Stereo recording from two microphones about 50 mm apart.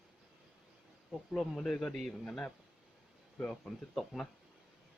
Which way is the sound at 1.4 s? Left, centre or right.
Centre.